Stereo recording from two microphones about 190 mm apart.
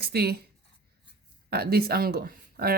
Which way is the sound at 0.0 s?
55° right (ahead or behind).